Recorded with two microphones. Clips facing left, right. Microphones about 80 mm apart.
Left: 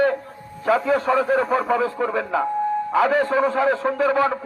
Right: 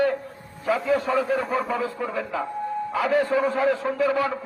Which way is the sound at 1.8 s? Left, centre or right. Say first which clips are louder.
Left 5 dB; left.